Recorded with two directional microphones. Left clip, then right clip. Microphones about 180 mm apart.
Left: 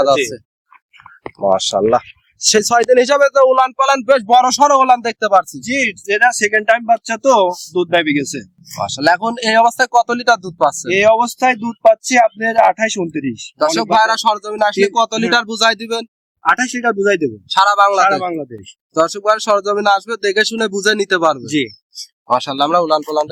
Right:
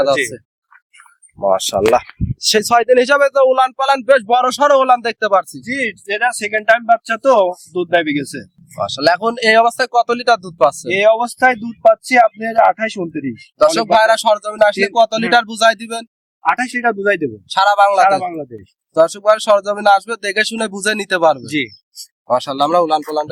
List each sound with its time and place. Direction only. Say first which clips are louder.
1.4 s speech: left 1 dB; centre (ahead or behind)
10.8 s speech: left 1 dB; 10° left (ahead or behind)
13.6 s speech: right 2 dB; 10° right (ahead or behind)
21.4 s speech: left 2 dB; 5° left (ahead or behind)